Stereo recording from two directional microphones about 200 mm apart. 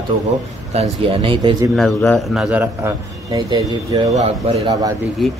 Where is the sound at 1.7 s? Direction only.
Centre (ahead or behind); by 4.1 s 20° right (ahead or behind).